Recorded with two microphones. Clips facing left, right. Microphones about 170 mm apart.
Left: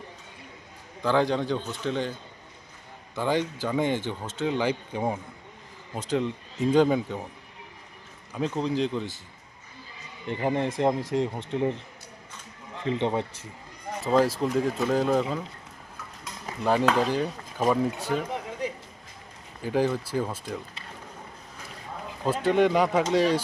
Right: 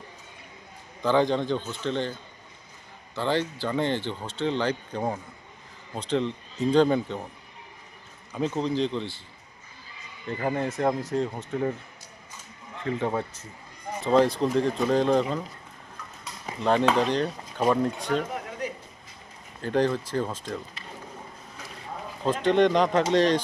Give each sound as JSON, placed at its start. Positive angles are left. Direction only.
{"t": 1.0, "sound": "speech", "side_deg": 5}
{"t": 3.2, "sound": "speech", "side_deg": 10}
{"t": 8.3, "sound": "speech", "side_deg": 0}
{"t": 10.2, "sound": "speech", "side_deg": 20}
{"t": 12.8, "sound": "speech", "side_deg": 20}
{"t": 14.0, "sound": "speech", "side_deg": 5}
{"t": 16.6, "sound": "speech", "side_deg": 5}
{"t": 19.6, "sound": "speech", "side_deg": 5}
{"t": 22.2, "sound": "speech", "side_deg": 10}